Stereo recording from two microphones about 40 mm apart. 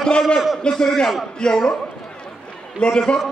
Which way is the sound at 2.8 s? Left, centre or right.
Centre.